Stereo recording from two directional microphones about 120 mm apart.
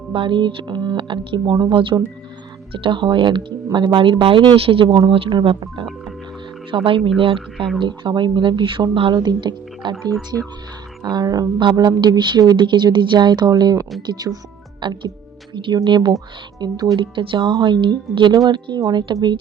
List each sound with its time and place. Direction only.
0.1 s a woman's voice: 45° right (ahead or behind)
11.0 s a woman's voice: 35° right (ahead or behind)